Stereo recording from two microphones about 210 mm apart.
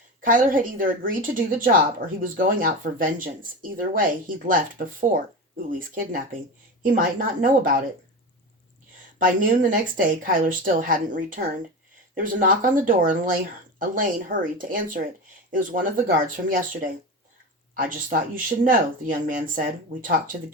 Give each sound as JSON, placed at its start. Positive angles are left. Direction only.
{"t": 0.3, "sound": "a woman's voice", "side_deg": -40}
{"t": 9.1, "sound": "a woman's voice", "side_deg": -40}
{"t": 17.7, "sound": "a woman's voice", "side_deg": -40}